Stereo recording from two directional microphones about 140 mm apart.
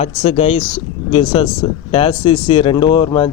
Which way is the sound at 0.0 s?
45° left (ahead or behind).